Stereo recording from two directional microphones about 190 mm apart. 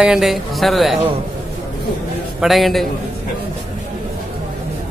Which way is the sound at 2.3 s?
Centre (ahead or behind).